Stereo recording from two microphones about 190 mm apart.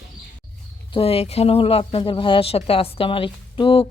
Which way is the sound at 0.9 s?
30° left (ahead or behind).